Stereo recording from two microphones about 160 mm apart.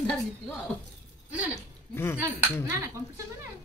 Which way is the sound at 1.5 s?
15° left (ahead or behind).